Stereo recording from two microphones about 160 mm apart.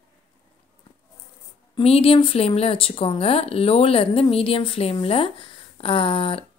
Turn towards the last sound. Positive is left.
turn(degrees=35)  # may be behind; listen again after turning